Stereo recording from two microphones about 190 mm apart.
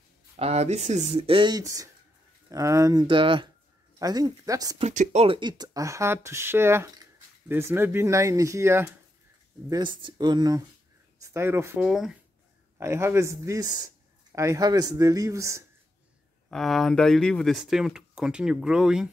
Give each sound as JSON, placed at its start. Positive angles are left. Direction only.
{"t": 0.4, "sound": "speech", "side_deg": -35}
{"t": 4.7, "sound": "speech", "side_deg": -40}
{"t": 9.7, "sound": "speech", "side_deg": -25}
{"t": 12.7, "sound": "speech", "side_deg": -15}
{"t": 16.4, "sound": "speech", "side_deg": 0}